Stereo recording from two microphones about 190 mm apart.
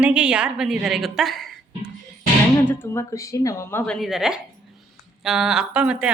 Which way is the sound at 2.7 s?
10° left (ahead or behind).